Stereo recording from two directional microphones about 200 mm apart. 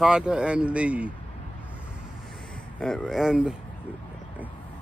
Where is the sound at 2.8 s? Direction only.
Centre (ahead or behind).